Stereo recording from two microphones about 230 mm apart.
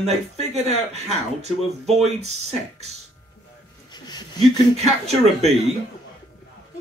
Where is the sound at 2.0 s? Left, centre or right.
Right.